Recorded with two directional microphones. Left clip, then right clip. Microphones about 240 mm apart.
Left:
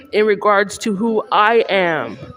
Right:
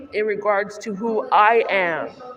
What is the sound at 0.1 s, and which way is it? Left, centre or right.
A woman's voice, left.